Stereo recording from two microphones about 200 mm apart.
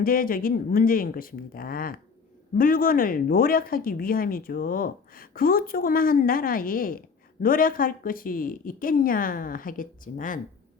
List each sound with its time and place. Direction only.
0.0 s speech: 45° left (ahead or behind)